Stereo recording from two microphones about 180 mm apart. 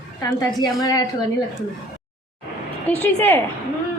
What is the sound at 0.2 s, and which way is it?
Speech, 20° left (ahead or behind).